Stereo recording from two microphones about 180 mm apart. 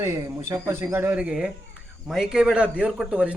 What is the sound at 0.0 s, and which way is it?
A man's voice, 15° right (ahead or behind).